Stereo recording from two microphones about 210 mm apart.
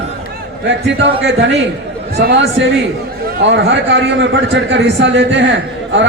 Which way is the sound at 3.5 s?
55° right (ahead or behind).